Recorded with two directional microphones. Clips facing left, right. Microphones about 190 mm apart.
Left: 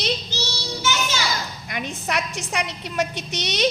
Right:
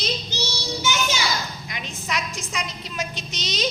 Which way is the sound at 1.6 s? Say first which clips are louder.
Left 4 dB; 55° left (ahead or behind).